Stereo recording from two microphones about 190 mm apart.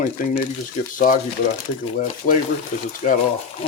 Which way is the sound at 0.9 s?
45° left (ahead or behind).